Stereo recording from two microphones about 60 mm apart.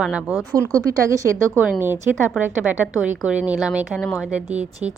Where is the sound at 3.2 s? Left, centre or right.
Right.